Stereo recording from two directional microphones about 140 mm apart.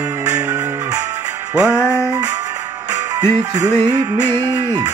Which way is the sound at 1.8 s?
20° left (ahead or behind).